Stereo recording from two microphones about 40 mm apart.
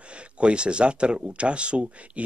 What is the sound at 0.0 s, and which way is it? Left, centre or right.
A man's voice, right.